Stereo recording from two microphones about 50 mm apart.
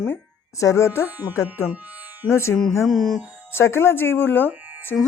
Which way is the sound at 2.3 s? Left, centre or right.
Left.